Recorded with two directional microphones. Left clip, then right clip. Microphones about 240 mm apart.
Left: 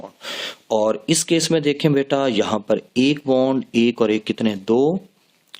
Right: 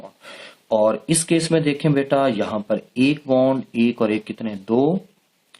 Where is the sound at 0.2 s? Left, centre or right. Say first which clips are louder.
Left 11 dB; left.